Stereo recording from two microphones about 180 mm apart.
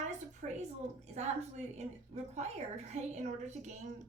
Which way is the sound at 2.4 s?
40° right (ahead or behind).